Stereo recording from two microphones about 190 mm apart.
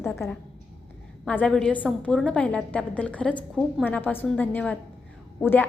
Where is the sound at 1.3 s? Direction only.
5° left (ahead or behind).